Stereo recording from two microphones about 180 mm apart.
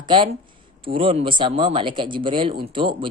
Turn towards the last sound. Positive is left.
turn(degrees=-30)  # may be behind; listen again after turning